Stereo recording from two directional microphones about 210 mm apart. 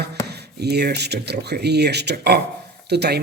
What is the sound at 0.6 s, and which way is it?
A man's voice, 50° right (ahead or behind).